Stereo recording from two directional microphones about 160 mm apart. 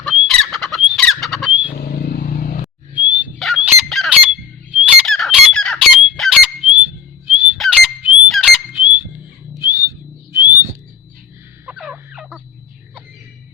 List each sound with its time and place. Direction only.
0.3 s squawk: centre (ahead or behind)
1.7 s vehicle: 75° left (ahead or behind); by 2.6 s 55° left (ahead or behind)
2.9 s dog: 10° right (ahead or behind)
3.3 s squawk: centre (ahead or behind)
7.6 s a sound: centre (ahead or behind)
10.3 s bird: 15° right (ahead or behind)
11.6 s fowl: 5° right (ahead or behind)